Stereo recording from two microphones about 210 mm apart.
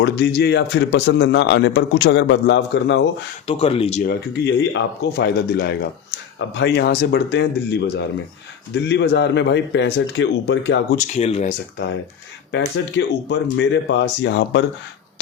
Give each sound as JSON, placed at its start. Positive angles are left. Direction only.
{"t": 0.0, "sound": "speech", "side_deg": 55}
{"t": 3.4, "sound": "speech", "side_deg": 25}
{"t": 4.0, "sound": "speech", "side_deg": 55}
{"t": 10.9, "sound": "speech", "side_deg": 35}
{"t": 12.5, "sound": "speech", "side_deg": 60}